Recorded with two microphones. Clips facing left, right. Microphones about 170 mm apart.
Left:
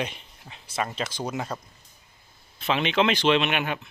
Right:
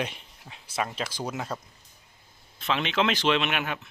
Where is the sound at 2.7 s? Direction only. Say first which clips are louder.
Left 3 dB; 5° left (ahead or behind).